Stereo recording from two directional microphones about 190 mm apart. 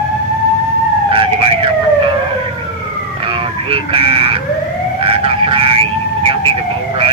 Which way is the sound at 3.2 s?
30° right (ahead or behind).